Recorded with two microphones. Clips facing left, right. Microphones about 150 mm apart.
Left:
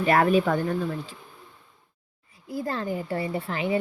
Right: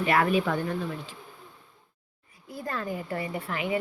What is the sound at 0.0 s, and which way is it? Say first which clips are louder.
Speech: left 4 dB; 40° left (ahead or behind).